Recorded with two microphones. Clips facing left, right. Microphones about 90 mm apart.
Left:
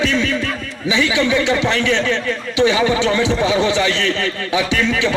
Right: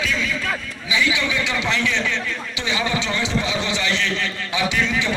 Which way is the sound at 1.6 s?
60° left (ahead or behind).